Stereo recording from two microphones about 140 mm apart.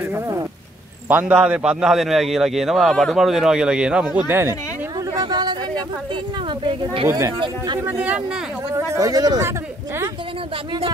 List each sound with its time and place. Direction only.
0.1 s a sound: 20° right (ahead or behind)
1.0 s a man's voice: 10° right (ahead or behind)
5.1 s chatter: 30° right (ahead or behind)
6.6 s speech: 40° right (ahead or behind)
7.1 s speech: 20° right (ahead or behind)
7.3 s speech: 35° right (ahead or behind)
7.8 s speech: 10° right (ahead or behind)
8.7 s speech: 25° right (ahead or behind)